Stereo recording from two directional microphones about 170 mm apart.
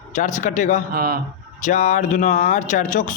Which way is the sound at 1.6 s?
45° left (ahead or behind).